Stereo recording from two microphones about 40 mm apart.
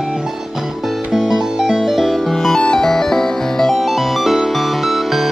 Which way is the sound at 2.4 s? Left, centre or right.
Centre.